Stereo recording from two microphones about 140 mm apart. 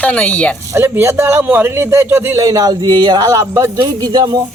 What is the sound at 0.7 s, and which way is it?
A man's voice, 20° right (ahead or behind).